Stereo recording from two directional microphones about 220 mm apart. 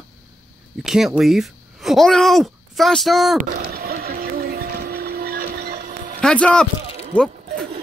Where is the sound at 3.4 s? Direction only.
45° right (ahead or behind).